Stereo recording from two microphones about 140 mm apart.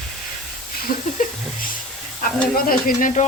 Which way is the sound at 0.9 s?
80° left.